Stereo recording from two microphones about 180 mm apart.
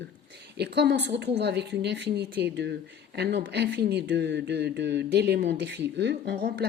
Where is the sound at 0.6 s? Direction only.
70° right (ahead or behind).